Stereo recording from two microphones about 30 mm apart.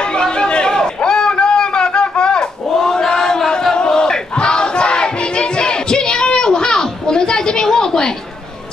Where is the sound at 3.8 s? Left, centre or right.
Left.